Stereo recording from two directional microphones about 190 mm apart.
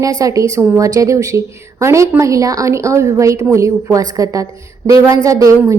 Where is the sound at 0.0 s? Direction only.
15° right (ahead or behind).